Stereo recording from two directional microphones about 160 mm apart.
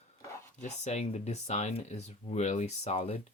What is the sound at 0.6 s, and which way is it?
Speech, 45° left (ahead or behind).